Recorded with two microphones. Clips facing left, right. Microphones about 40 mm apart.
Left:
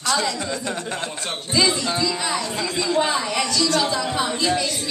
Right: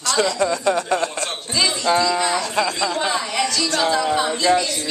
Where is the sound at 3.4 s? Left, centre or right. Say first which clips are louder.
Right 2 dB; centre.